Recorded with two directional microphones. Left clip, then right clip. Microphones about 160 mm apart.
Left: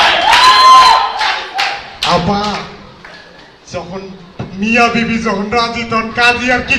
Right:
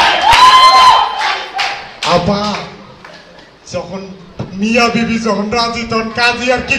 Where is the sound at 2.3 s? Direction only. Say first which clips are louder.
Even; 50° right (ahead or behind).